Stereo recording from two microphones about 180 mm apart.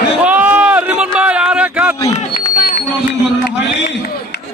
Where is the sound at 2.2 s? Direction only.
45° left (ahead or behind).